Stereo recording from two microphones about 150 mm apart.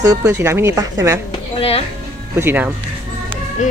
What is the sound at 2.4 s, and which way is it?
Speech, 15° right (ahead or behind).